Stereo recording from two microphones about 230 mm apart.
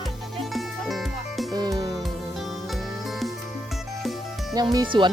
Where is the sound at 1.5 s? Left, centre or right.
Centre.